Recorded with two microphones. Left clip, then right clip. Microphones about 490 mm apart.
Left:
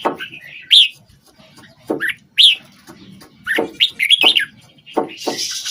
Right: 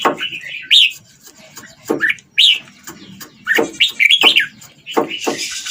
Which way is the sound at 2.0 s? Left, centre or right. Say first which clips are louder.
Even; left.